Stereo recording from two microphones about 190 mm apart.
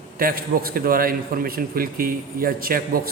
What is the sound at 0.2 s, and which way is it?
A man's voice, 50° right (ahead or behind).